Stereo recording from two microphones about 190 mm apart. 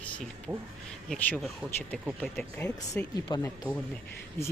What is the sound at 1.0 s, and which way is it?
Speech, 5° left (ahead or behind).